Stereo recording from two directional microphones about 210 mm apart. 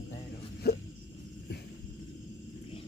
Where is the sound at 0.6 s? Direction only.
50° left (ahead or behind).